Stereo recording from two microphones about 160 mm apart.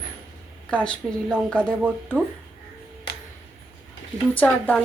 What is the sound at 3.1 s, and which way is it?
Music, 90° left.